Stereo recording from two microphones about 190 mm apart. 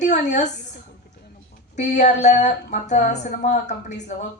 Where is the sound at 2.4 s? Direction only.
40° left (ahead or behind).